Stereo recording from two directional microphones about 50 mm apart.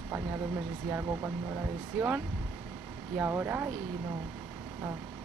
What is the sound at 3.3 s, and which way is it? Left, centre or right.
Speech, right.